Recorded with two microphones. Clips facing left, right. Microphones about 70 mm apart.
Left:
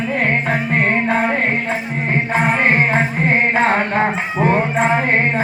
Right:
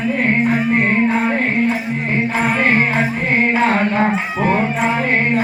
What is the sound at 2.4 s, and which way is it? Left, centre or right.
Music, left.